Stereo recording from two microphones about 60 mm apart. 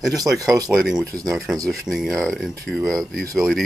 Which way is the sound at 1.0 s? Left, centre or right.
Right.